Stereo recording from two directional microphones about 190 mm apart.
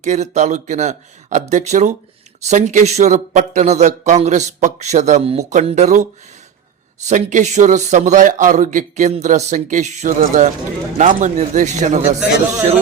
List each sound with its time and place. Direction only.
0.0 s a man's voice: 35° right (ahead or behind)